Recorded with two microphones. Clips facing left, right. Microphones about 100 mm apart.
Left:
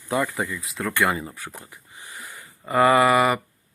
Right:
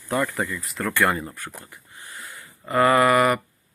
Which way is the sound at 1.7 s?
20° left (ahead or behind).